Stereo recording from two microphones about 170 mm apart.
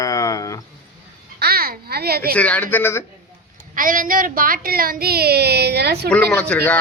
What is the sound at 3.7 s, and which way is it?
A woman's voice, 55° right (ahead or behind).